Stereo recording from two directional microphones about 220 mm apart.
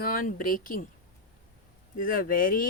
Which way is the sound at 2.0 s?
40° left (ahead or behind).